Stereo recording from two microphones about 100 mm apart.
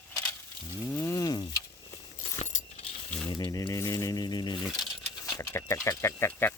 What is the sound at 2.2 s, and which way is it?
Keys jangling, 90° left.